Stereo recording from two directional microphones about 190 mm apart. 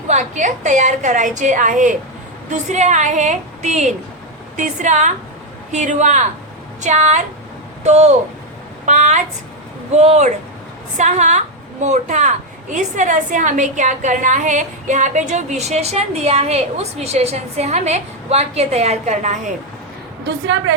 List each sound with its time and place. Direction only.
0.1 s a woman's voice: 40° right (ahead or behind)